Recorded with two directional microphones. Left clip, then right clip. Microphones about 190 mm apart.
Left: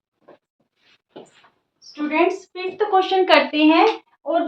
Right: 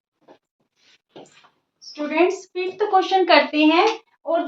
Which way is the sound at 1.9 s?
15° right (ahead or behind).